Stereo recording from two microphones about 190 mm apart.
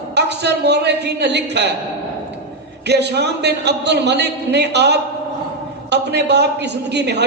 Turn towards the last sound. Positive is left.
turn(degrees=-60)  # may be behind; listen again after turning